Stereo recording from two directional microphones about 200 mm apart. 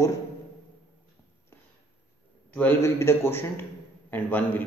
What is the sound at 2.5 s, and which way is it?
A man's voice, 10° left (ahead or behind).